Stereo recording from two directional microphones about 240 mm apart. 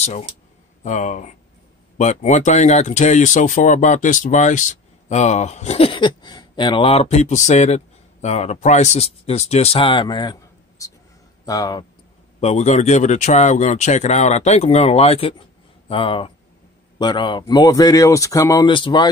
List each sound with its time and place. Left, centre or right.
0.0 s speech: left
12.4 s speech: left